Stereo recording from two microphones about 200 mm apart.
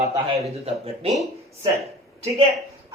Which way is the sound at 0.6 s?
30° right (ahead or behind).